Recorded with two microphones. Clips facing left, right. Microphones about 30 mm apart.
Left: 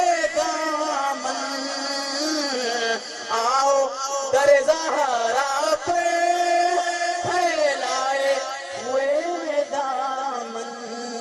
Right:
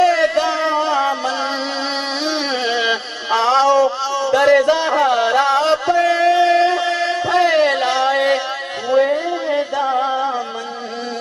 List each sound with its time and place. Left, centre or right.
0.0 s music: right
2.2 s a sound: right
8.9 s music: right